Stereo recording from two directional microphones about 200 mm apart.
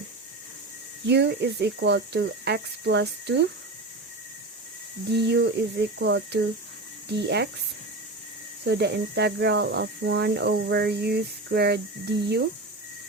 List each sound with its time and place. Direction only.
1.0 s speech: 55° right (ahead or behind)
5.1 s speech: 55° right (ahead or behind)
8.6 s speech: 55° right (ahead or behind)